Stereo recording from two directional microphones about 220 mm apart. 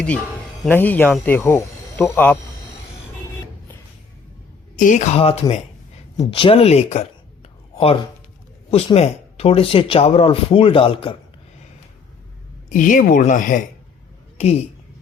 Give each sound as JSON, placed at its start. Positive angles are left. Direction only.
{"t": 0.6, "sound": "speech", "side_deg": 10}
{"t": 4.8, "sound": "speech", "side_deg": 35}
{"t": 12.6, "sound": "speech", "side_deg": 35}